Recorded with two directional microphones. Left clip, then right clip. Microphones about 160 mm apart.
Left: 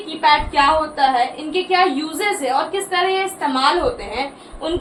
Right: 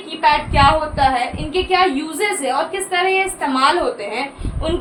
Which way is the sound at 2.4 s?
30° right (ahead or behind).